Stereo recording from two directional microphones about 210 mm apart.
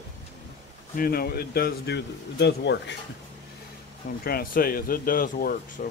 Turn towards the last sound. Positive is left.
turn(degrees=40)  # may be behind; listen again after turning